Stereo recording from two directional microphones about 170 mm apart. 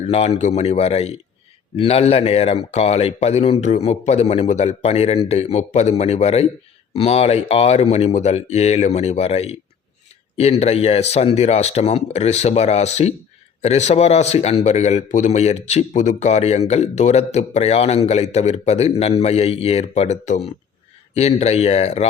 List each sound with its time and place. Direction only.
0.1 s a man's voice: 40° left (ahead or behind)